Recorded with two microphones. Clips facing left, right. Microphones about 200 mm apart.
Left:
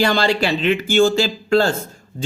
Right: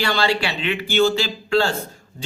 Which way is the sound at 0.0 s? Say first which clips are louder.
Left 4 dB; 45° left (ahead or behind).